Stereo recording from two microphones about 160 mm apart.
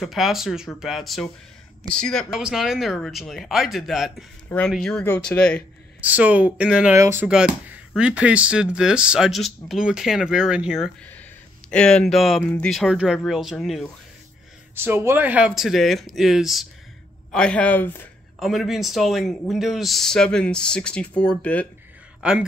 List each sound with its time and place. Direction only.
0.0 s speech: centre (ahead or behind)
5.9 s speech: 10° right (ahead or behind)
7.2 s speech: 5° right (ahead or behind)
14.8 s speech: 15° right (ahead or behind); by 18.0 s 10° left (ahead or behind)
18.4 s speech: centre (ahead or behind)
22.2 s speech: 5° right (ahead or behind)